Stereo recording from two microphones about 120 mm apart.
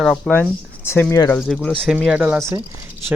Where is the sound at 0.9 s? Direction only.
20° left (ahead or behind).